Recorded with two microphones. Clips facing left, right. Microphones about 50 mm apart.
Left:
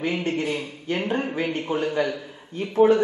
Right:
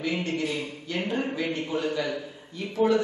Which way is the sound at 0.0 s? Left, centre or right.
Left.